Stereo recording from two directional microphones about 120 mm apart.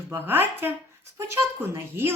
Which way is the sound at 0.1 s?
20° right (ahead or behind).